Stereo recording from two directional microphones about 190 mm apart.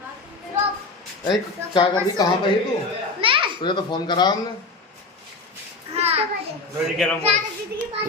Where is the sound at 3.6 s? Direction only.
25° left (ahead or behind).